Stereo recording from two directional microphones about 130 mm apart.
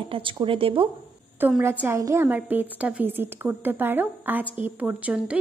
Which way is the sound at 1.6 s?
20° right (ahead or behind).